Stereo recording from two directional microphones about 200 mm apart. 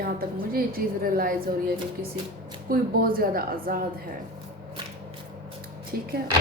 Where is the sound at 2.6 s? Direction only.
45° right (ahead or behind).